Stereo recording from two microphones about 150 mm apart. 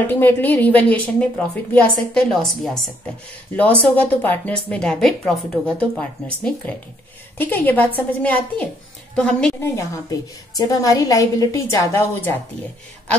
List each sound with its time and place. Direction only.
0.0 s a woman's voice: 15° left (ahead or behind)
7.3 s a woman's voice: 10° left (ahead or behind)
9.6 s a woman's voice: 20° left (ahead or behind)